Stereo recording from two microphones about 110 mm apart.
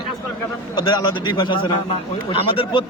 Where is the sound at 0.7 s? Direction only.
40° left (ahead or behind).